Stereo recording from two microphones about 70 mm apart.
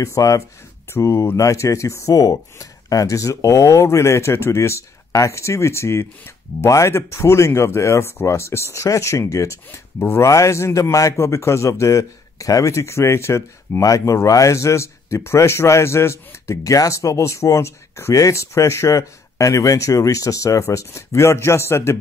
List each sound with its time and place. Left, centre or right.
0.0 s speech: left
0.9 s speech: left